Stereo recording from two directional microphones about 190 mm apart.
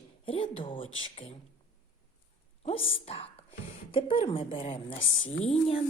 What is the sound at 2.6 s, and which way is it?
A woman's voice, 30° left (ahead or behind).